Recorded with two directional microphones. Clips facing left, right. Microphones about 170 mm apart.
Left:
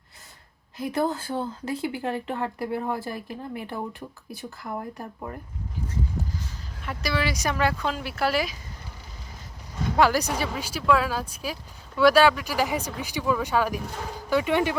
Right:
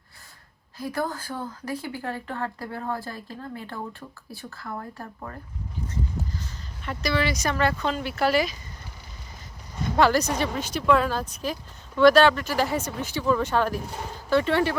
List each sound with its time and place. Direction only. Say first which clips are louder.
0.8 s speech: left 3 dB; 20° left (ahead or behind)
6.8 s speech: right 2 dB; 5° left (ahead or behind)
10.0 s speech: right 1 dB; 10° left (ahead or behind)